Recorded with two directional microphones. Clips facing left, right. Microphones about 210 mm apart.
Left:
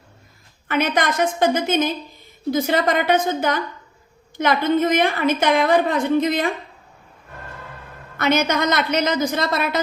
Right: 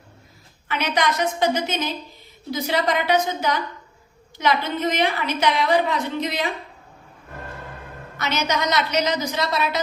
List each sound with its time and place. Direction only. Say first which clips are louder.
0.7 s a woman's voice: left 3 dB; 50° left (ahead or behind)
8.2 s a woman's voice: left 5 dB; 55° left (ahead or behind)